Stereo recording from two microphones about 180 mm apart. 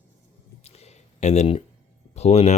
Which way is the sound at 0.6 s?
35° left (ahead or behind).